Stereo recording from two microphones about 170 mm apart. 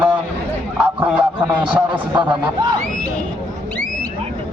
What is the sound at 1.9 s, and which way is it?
Speech, 25° right (ahead or behind).